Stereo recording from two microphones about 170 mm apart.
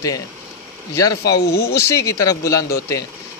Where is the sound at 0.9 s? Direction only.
20° left (ahead or behind).